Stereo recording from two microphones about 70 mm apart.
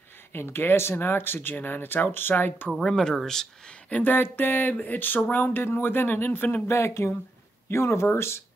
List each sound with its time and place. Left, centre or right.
0.3 s speech: left
2.8 s speech: centre
3.9 s speech: left
6.7 s speech: left